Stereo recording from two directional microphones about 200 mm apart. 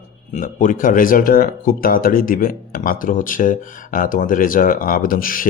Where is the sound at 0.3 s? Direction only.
40° left (ahead or behind).